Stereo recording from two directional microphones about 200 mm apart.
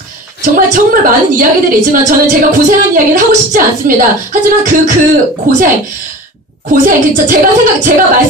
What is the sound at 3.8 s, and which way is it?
A woman's voice, 40° right (ahead or behind).